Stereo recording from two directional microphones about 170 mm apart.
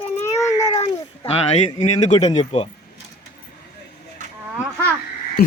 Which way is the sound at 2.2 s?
30° left (ahead or behind).